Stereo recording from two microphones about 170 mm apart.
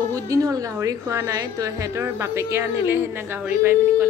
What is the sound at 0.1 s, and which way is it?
A woman's voice, 20° right (ahead or behind).